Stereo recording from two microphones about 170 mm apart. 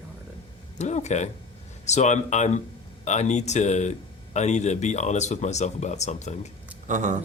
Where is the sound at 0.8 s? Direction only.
40° left (ahead or behind).